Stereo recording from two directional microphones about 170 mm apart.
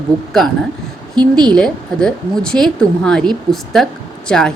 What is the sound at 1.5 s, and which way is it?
Speech, 5° left (ahead or behind).